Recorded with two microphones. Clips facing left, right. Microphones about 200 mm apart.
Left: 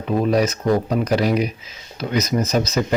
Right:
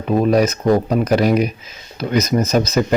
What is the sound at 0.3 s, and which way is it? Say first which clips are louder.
Speech: right 3 dB; 50° right (ahead or behind).